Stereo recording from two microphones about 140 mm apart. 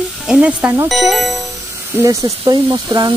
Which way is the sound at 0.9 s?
Centre (ahead or behind).